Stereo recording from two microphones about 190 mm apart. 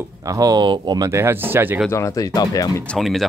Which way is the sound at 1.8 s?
15° left (ahead or behind).